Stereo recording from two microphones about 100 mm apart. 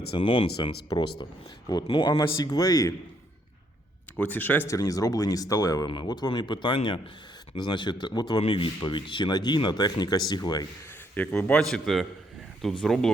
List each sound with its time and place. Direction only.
0.1 s speech: 60° left (ahead or behind); by 2.9 s 40° left (ahead or behind)
4.2 s speech: 20° left (ahead or behind)
4.7 s speech: 35° left (ahead or behind); by 6.7 s 50° left (ahead or behind)
6.7 s speech: 65° left (ahead or behind)
7.5 s speech: 50° left (ahead or behind)
11.1 s a man's voice: 15° left (ahead or behind)